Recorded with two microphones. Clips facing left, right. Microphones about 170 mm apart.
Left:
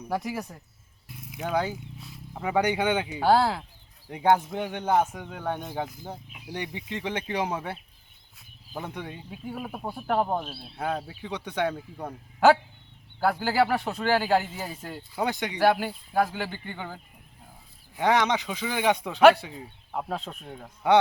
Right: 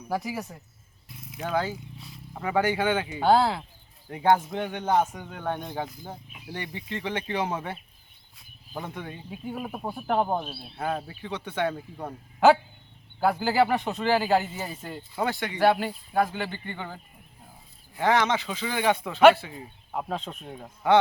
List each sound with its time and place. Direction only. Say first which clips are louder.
0.1 s speech: even; centre (ahead or behind)
2.0 s speech: left 1 dB; centre (ahead or behind)
2.6 s speech: even; 15° left (ahead or behind)
3.2 s speech: right 1 dB; 5° left (ahead or behind)
4.1 s speech: even; 15° left (ahead or behind)
8.4 s a sound: even; centre (ahead or behind)
9.3 s speech: right 2 dB; centre (ahead or behind)
11.2 s speech: left 1 dB; 15° left (ahead or behind)
12.0 s speech: even; centre (ahead or behind)
15.2 s speech: even; 15° left (ahead or behind)
19.5 s speech: even; centre (ahead or behind)